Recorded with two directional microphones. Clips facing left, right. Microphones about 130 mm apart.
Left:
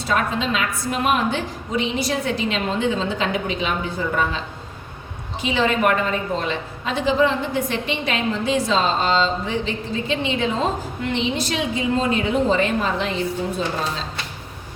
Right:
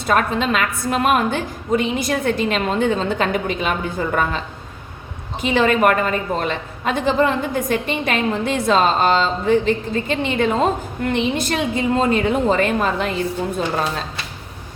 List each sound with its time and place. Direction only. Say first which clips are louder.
0.1 s a woman's voice: right 4 dB; 55° right (ahead or behind)
5.4 s a woman's voice: right 4 dB; 50° right (ahead or behind)